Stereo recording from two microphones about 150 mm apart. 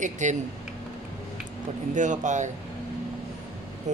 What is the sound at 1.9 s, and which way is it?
Speech, 55° right (ahead or behind).